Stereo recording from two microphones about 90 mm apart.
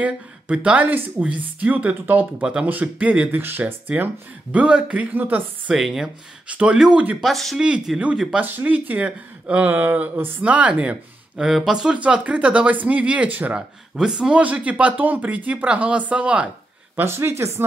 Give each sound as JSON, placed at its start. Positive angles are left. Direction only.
{"t": 0.0, "sound": "speech", "side_deg": -15}
{"t": 5.8, "sound": "speech", "side_deg": 0}
{"t": 6.4, "sound": "speech", "side_deg": -15}
{"t": 7.2, "sound": "speech", "side_deg": 0}
{"t": 16.9, "sound": "speech", "side_deg": -25}